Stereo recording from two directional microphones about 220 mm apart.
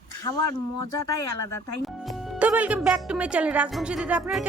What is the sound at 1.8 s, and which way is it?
Speech, centre (ahead or behind).